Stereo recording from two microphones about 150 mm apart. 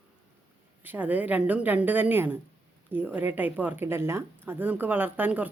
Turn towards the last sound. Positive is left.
turn(degrees=-10)  # may be behind; listen again after turning